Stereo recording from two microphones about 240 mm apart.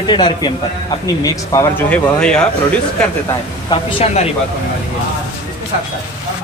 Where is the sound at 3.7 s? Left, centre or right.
Left.